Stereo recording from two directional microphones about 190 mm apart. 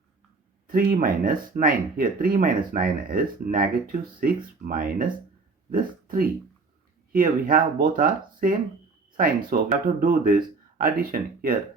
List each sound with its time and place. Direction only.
0.7 s speech: 45° right (ahead or behind)